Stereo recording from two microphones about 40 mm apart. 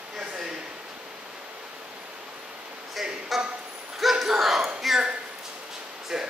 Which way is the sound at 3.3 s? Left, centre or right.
Centre.